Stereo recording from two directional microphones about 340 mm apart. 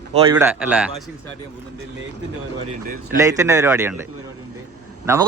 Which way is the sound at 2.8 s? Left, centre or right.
Right.